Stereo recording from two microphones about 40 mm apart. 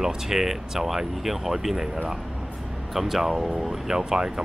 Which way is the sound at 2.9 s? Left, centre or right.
Centre.